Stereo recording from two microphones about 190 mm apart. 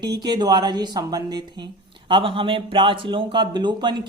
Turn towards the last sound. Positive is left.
turn(degrees=-25)  # may be behind; listen again after turning